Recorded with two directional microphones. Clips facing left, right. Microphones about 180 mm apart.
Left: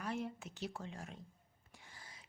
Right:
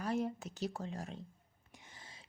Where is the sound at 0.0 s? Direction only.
40° right (ahead or behind).